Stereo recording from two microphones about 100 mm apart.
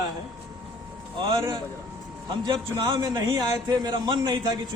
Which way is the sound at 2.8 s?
40° right (ahead or behind).